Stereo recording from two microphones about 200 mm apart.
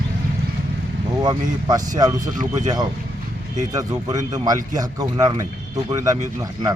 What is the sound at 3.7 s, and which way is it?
Speech, 15° right (ahead or behind).